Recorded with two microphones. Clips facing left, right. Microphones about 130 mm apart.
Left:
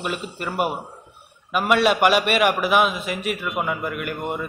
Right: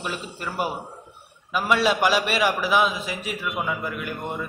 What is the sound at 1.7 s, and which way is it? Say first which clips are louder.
A man's voice: left 3 dB; 60° left (ahead or behind).